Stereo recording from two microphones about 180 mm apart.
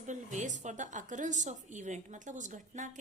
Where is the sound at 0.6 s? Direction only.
40° right (ahead or behind).